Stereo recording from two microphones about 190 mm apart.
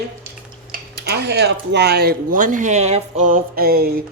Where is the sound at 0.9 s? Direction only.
60° right (ahead or behind).